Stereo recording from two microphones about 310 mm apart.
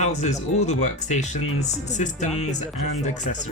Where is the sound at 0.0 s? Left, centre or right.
Left.